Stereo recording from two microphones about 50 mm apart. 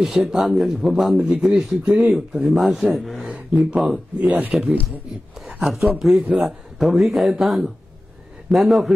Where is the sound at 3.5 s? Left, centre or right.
Right.